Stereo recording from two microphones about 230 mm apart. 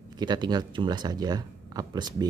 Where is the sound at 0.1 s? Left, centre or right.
Centre.